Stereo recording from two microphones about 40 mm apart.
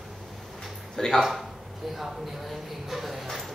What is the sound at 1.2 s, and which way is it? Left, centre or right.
Speech, centre.